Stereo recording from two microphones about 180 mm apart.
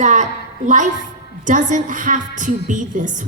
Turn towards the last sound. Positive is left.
turn(degrees=-45)  # may be behind; listen again after turning